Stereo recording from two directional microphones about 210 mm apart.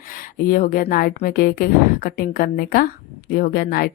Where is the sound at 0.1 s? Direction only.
40° left (ahead or behind).